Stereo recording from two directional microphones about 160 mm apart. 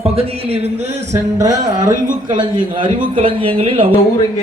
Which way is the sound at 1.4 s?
20° right (ahead or behind).